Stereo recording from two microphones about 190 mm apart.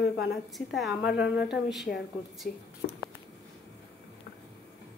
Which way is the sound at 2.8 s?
55° left (ahead or behind).